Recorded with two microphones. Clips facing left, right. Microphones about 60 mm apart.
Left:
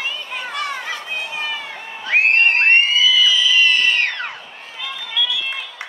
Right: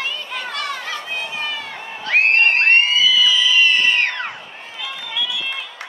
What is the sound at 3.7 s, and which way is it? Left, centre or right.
Cat, centre.